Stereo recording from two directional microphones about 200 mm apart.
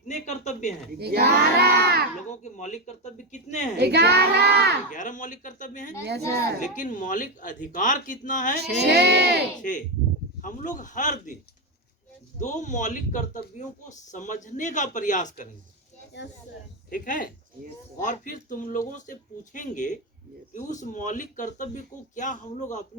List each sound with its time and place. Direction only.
0.1 s a sound: 35° left (ahead or behind)
0.9 s speech: 55° right (ahead or behind)
2.4 s speech: 35° left (ahead or behind)
3.8 s child singing: 55° right (ahead or behind)
4.9 s speech: 40° left (ahead or behind)
8.6 s child singing: 55° right (ahead or behind)
10.4 s speech: 40° left (ahead or behind)
12.4 s speech: 40° left (ahead or behind)
16.9 s speech: 45° left (ahead or behind)